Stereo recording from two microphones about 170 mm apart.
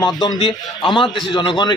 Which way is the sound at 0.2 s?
25° left (ahead or behind).